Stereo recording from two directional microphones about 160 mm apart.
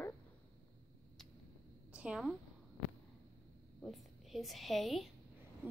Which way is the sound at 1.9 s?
5° right (ahead or behind).